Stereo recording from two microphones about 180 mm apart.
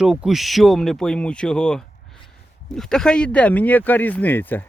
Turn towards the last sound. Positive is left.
turn(degrees=10)  # may be behind; listen again after turning